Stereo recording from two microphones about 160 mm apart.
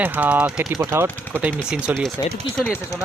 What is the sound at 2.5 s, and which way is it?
Speech, 15° left (ahead or behind).